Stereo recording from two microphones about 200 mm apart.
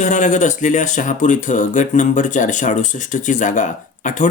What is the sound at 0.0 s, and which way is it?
Speech, 40° left (ahead or behind).